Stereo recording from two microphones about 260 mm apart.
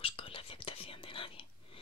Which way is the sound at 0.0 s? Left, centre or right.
Left.